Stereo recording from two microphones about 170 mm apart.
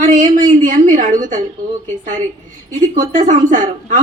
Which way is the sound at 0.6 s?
50° right (ahead or behind).